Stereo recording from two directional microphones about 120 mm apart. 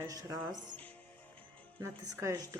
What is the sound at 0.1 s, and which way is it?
Speech, 30° right (ahead or behind).